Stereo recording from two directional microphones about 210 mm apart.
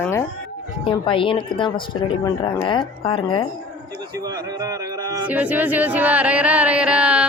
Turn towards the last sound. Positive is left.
turn(degrees=-5)  # may be behind; listen again after turning